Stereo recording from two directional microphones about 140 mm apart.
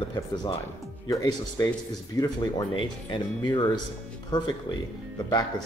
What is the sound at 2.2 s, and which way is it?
Speech, 30° left (ahead or behind).